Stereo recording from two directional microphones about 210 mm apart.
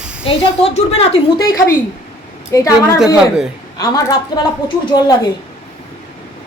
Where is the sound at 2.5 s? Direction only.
15° left (ahead or behind).